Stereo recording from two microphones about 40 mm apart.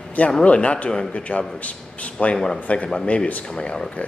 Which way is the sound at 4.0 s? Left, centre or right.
Left.